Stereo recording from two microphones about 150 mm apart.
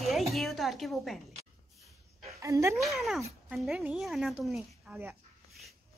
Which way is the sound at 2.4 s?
20° right (ahead or behind).